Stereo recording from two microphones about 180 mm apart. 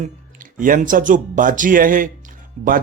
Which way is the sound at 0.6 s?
50° right (ahead or behind).